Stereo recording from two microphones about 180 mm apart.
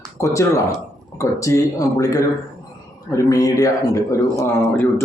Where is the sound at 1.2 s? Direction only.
20° left (ahead or behind).